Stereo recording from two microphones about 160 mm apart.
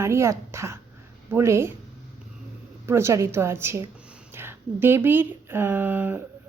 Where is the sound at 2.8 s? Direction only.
15° right (ahead or behind).